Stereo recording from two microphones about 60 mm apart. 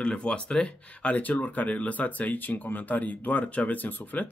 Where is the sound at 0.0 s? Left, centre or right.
Centre.